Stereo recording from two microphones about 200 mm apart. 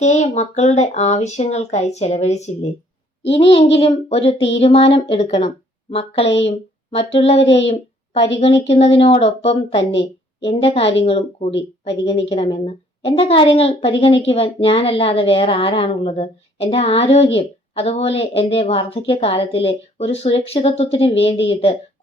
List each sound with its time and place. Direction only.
0.0 s a woman's voice: 35° left (ahead or behind)